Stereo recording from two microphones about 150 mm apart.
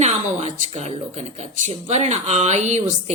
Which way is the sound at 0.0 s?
50° right (ahead or behind).